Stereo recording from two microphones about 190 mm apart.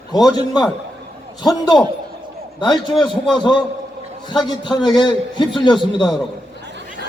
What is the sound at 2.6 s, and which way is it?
Speech, 25° left (ahead or behind).